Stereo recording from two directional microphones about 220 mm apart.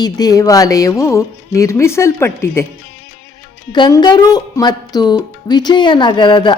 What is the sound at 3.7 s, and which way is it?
A woman's voice, 20° left (ahead or behind).